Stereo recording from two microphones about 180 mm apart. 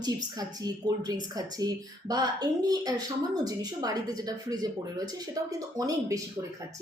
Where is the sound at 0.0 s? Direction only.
20° right (ahead or behind).